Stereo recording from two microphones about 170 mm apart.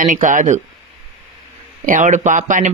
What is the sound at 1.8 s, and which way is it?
Speech, 50° right (ahead or behind).